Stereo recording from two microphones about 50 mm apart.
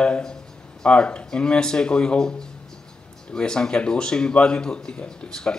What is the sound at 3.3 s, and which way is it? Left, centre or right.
Speech, centre.